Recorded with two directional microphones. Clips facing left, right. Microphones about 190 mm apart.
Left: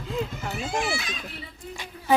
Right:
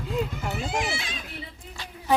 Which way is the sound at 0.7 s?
15° right (ahead or behind).